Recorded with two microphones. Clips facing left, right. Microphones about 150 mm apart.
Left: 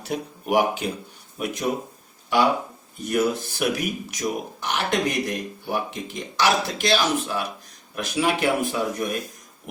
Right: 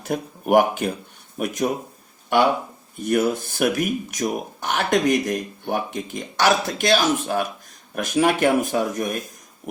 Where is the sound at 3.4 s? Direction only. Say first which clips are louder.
Right 3 dB; 45° right (ahead or behind).